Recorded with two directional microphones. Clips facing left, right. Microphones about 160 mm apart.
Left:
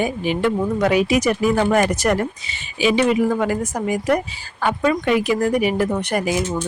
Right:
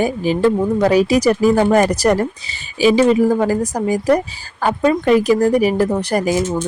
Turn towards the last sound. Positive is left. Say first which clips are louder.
# right 4 dB
turn(degrees=-40)  # may be behind; listen again after turning